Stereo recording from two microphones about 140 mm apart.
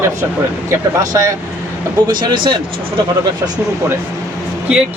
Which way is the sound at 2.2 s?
35° right (ahead or behind).